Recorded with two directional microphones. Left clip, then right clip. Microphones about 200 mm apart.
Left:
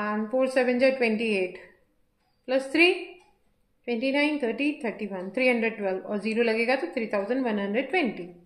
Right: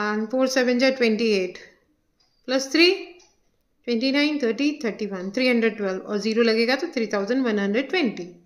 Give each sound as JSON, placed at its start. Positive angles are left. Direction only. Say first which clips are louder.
{"t": 0.0, "sound": "a woman's voice", "louder": "right 3 dB", "side_deg": -35}